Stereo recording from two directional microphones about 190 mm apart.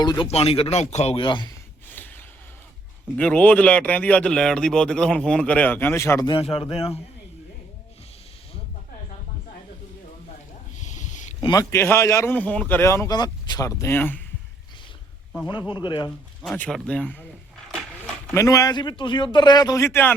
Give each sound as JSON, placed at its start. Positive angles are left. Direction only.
{"t": 0.0, "sound": "a man's voice", "side_deg": 20}
{"t": 1.5, "sound": "a sound", "side_deg": 10}
{"t": 3.2, "sound": "speech", "side_deg": 5}
{"t": 10.8, "sound": "a sound", "side_deg": 40}
{"t": 11.3, "sound": "speech", "side_deg": 20}
{"t": 15.7, "sound": "a man's voice", "side_deg": 25}
{"t": 16.4, "sound": "speech", "side_deg": 5}
{"t": 17.7, "sound": "a sound", "side_deg": 5}
{"t": 18.3, "sound": "a man's voice", "side_deg": 20}